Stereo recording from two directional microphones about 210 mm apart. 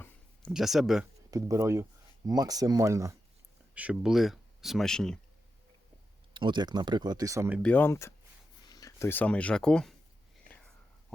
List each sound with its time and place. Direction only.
0.0 s a sound: centre (ahead or behind)
1.3 s speech: 15° right (ahead or behind); by 5.2 s 5° left (ahead or behind)
6.3 s speech: 20° right (ahead or behind)
7.6 s speech: 10° left (ahead or behind)